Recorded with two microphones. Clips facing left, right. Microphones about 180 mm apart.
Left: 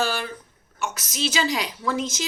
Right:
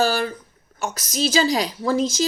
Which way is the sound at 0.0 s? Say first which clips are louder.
Right 5 dB; 40° right (ahead or behind).